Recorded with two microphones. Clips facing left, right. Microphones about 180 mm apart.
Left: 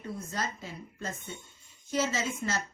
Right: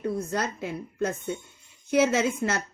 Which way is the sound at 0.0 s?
65° right (ahead or behind).